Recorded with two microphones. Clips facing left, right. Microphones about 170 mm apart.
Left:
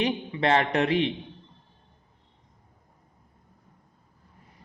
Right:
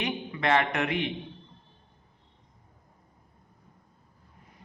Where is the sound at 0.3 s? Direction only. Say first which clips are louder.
Right 1 dB; 30° left (ahead or behind).